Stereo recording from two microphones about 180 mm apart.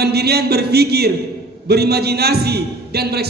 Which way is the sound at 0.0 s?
65° right (ahead or behind).